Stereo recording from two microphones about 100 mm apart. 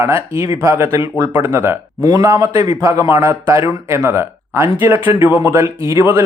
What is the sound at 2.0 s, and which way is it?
A man's voice, 35° right (ahead or behind).